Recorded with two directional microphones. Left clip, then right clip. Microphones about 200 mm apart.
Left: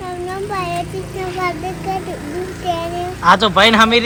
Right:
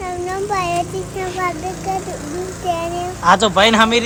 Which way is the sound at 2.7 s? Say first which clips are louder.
Even; 10° right (ahead or behind).